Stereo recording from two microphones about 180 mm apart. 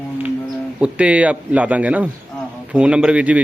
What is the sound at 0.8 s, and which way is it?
A man's voice, 5° right (ahead or behind).